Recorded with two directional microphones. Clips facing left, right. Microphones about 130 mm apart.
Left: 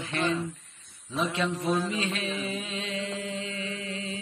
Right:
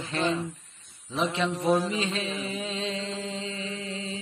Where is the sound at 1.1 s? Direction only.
30° right (ahead or behind).